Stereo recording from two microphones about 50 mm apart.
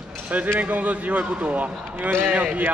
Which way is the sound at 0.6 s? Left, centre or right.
Right.